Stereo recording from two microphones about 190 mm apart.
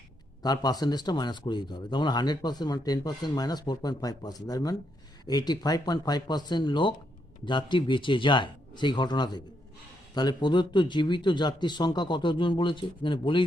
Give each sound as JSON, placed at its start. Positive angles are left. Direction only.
{"t": 0.4, "sound": "a man's voice", "side_deg": 20}